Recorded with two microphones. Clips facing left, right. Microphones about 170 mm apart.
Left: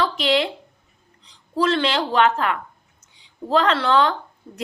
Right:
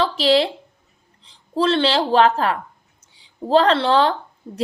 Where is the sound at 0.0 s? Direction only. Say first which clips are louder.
Right 3 dB; 35° right (ahead or behind).